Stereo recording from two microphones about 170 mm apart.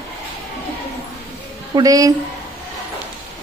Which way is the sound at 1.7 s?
20° right (ahead or behind).